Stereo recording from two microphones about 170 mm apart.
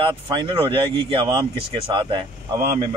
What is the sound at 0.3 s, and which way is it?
Speech, 30° right (ahead or behind).